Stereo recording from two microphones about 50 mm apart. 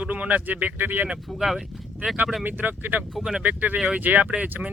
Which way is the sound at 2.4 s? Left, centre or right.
Right.